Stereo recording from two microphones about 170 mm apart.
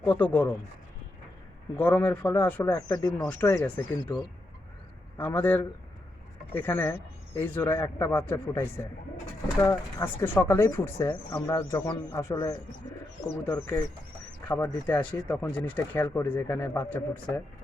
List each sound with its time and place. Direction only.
0.0 s speech: 10° left (ahead or behind)
1.7 s speech: 10° left (ahead or behind)